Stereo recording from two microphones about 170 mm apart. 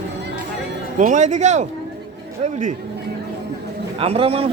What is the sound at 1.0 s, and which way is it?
Speech, 45° right (ahead or behind).